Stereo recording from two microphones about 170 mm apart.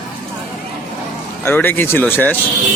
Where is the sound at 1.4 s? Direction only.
10° left (ahead or behind).